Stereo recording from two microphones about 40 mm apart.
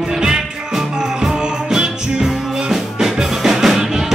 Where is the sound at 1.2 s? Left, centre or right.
Centre.